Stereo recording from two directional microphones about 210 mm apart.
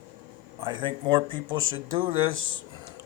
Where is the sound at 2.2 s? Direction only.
70° right (ahead or behind).